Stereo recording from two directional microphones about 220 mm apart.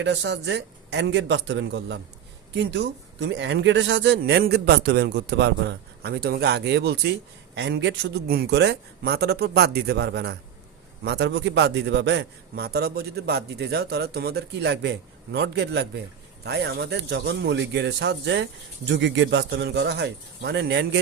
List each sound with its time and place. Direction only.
0.0 s a man's voice: 50° right (ahead or behind)